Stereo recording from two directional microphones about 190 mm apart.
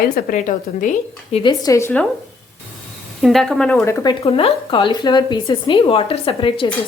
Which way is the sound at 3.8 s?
15° left (ahead or behind).